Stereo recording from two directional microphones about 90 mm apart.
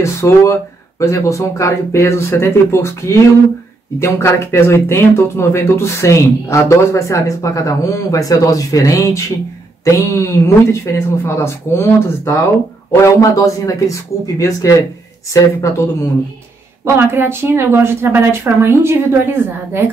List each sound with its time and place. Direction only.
0.0 s speech: 35° left (ahead or behind)
16.8 s a woman's voice: 25° right (ahead or behind)